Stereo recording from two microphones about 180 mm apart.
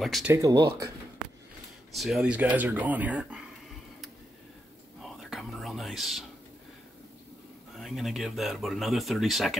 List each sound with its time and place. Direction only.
0.0 s speech: centre (ahead or behind)
0.3 s speech: 20° right (ahead or behind)
1.9 s speech: centre (ahead or behind)
5.0 s whispering: centre (ahead or behind)
7.7 s speech: centre (ahead or behind)